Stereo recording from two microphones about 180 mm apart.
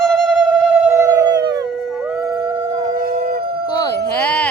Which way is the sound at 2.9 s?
55° right (ahead or behind).